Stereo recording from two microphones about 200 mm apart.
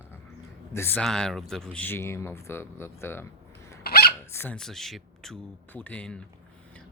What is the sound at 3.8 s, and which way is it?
Hiccup, 50° left (ahead or behind).